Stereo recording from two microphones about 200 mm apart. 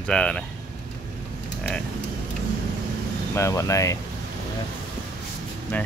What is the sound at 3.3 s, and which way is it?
Speech, 15° left (ahead or behind).